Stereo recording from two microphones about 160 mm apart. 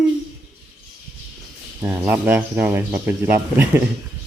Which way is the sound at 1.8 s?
10° right (ahead or behind).